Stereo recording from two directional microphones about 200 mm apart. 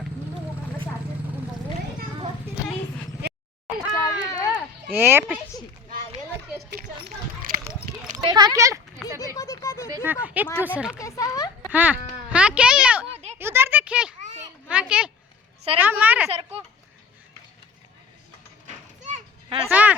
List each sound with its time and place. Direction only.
3.9 s a sound: 15° left (ahead or behind)
4.9 s speech: 10° right (ahead or behind)
7.7 s a sound: 40° right (ahead or behind)
8.2 s speech: 20° right (ahead or behind)
9.3 s a sound: 15° left (ahead or behind)
9.9 s speech: 10° right (ahead or behind)
10.9 s speech: 15° left (ahead or behind)
11.6 s speech: 10° right (ahead or behind)
13.4 s a sound: 10° right (ahead or behind)
15.8 s speech: 10° right (ahead or behind)
16.3 s speech: 30° right (ahead or behind)
19.7 s speech: 10° right (ahead or behind)